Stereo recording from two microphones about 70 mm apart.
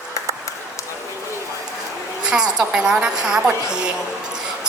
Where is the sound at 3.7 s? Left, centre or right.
Centre.